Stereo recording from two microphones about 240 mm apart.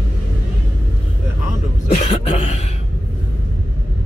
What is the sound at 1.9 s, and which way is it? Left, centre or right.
Cough, left.